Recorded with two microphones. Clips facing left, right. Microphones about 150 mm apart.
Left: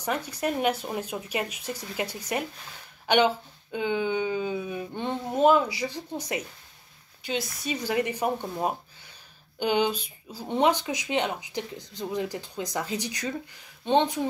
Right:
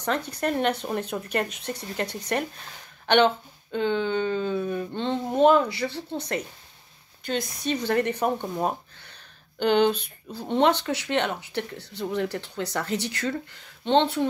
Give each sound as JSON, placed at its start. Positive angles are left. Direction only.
{"t": 0.0, "sound": "speech", "side_deg": 10}
{"t": 7.6, "sound": "speech", "side_deg": 10}
{"t": 9.6, "sound": "speech", "side_deg": 10}
{"t": 9.9, "sound": "speech", "side_deg": -60}
{"t": 10.6, "sound": "speech", "side_deg": 10}